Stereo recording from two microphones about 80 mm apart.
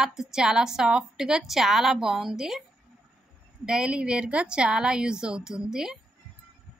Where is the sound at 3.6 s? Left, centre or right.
Centre.